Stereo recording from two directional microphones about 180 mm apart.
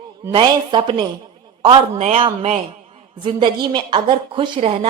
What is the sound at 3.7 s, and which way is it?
A woman's voice, 30° right (ahead or behind).